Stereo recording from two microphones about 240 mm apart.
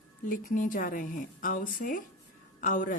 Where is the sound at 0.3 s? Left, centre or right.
Left.